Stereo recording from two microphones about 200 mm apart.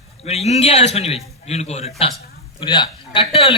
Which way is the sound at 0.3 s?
30° left (ahead or behind).